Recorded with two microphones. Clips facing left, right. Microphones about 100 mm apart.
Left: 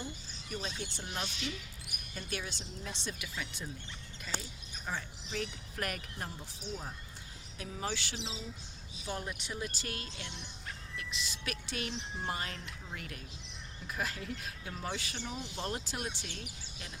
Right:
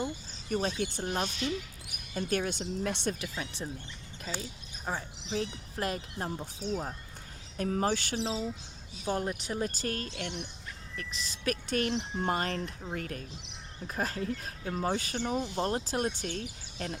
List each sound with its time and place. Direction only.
0.5 s speech: 50° right (ahead or behind)
3.2 s speech: 35° right (ahead or behind)
4.9 s speech: 35° right (ahead or behind)
6.4 s speech: 50° right (ahead or behind)
10.1 s speech: 65° right (ahead or behind)
10.9 s speech: 40° right (ahead or behind)